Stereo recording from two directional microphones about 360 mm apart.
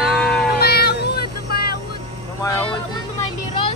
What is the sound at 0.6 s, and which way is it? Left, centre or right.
Child singing, left.